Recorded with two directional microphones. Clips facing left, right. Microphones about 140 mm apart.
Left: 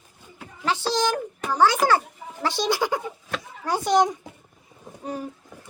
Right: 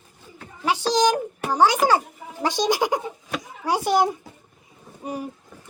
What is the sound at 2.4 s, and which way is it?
A child's voice, 15° right (ahead or behind).